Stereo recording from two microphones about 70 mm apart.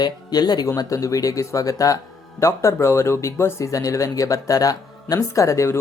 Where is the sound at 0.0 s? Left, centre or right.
Left.